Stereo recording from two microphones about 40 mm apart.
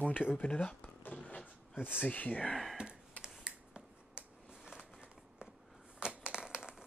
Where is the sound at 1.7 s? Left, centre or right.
Left.